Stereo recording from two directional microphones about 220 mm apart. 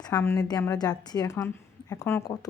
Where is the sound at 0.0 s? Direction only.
15° left (ahead or behind).